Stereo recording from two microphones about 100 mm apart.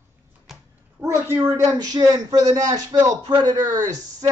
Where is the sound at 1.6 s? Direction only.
45° right (ahead or behind).